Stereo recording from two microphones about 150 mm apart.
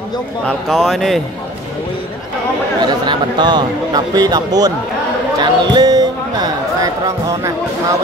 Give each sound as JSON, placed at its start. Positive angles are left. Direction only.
{"t": 0.5, "sound": "speech", "side_deg": 5}
{"t": 2.8, "sound": "speech", "side_deg": -30}